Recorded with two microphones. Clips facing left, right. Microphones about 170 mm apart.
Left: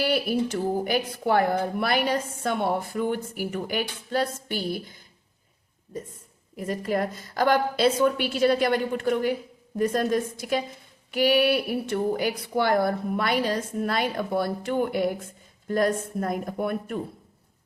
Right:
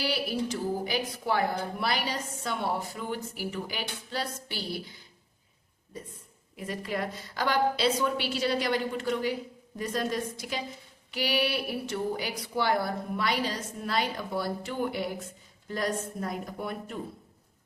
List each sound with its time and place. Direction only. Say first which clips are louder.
0.0 s a woman's voice: left 6 dB; 55° left (ahead or behind)
6.6 s a woman's voice: left 6 dB; 45° left (ahead or behind)